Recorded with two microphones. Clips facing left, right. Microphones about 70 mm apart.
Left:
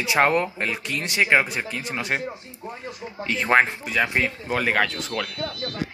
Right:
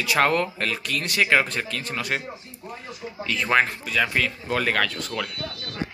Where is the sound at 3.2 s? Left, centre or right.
Left.